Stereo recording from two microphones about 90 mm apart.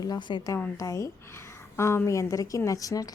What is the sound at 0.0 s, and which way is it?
Speech, 55° left (ahead or behind).